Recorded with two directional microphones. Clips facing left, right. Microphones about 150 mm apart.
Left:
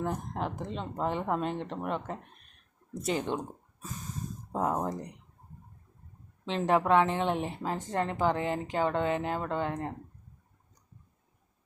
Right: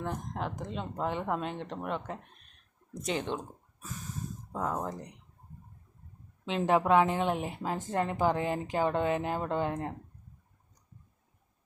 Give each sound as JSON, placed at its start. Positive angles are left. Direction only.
{"t": 0.0, "sound": "speech", "side_deg": 5}
{"t": 4.5, "sound": "speech", "side_deg": 20}
{"t": 6.4, "sound": "a woman's voice", "side_deg": -5}
{"t": 8.4, "sound": "speech", "side_deg": 25}
{"t": 8.7, "sound": "a woman's voice", "side_deg": -10}